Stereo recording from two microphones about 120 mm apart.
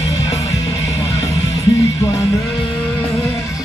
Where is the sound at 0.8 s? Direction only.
65° left (ahead or behind).